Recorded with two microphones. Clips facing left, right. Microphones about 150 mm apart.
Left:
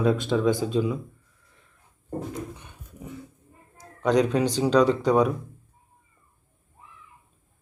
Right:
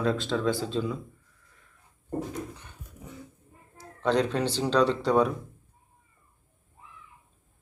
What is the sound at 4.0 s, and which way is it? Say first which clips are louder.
A man's voice: left 4 dB; 10° left (ahead or behind).